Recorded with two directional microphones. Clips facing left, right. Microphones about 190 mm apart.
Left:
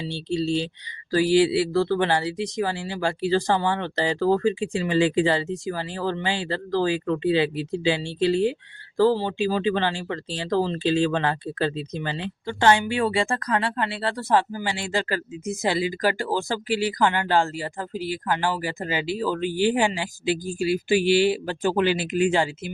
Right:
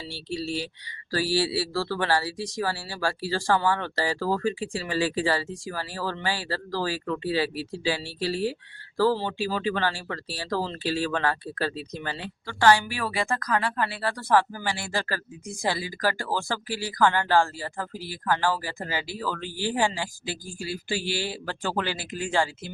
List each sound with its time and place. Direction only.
0.1 s speech: 25° left (ahead or behind)